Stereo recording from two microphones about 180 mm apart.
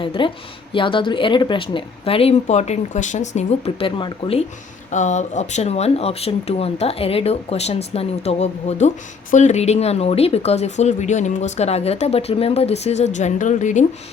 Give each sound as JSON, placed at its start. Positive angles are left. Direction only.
{"t": 0.0, "sound": "speech", "side_deg": 30}
{"t": 4.9, "sound": "speech", "side_deg": 40}